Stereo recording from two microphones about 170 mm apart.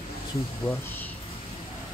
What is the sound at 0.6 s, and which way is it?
Speech, 15° left (ahead or behind).